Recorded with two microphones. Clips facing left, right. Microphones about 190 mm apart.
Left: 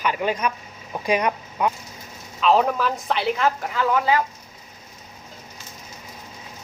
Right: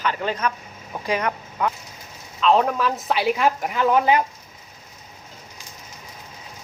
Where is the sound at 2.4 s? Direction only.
Centre (ahead or behind); by 4.2 s 20° right (ahead or behind).